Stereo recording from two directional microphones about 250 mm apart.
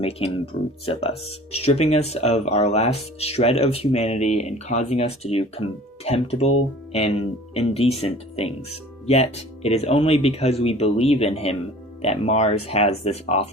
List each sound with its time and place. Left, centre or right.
0.5 s speech: left